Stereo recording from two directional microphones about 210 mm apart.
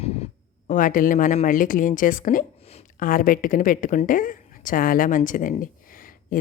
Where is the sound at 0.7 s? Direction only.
40° left (ahead or behind).